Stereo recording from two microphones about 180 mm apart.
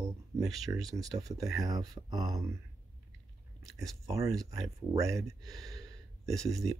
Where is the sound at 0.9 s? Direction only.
20° right (ahead or behind).